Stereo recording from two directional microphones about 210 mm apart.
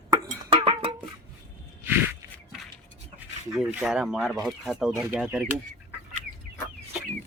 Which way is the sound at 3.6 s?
5° right (ahead or behind).